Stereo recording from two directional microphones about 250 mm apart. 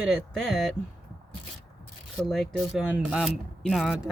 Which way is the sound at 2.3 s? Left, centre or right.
Centre.